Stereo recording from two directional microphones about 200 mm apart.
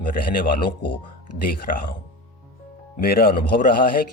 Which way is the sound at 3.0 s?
50° left (ahead or behind).